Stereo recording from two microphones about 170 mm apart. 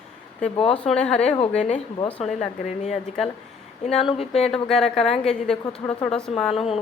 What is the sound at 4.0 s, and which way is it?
Speech, 35° left (ahead or behind).